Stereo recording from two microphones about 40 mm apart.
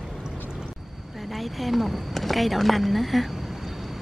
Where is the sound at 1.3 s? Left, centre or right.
Centre.